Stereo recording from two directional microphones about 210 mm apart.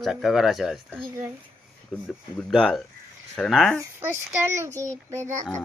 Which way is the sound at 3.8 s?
10° right (ahead or behind).